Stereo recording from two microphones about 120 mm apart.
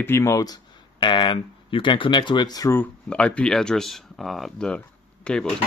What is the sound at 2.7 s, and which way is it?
Speech, 10° left (ahead or behind).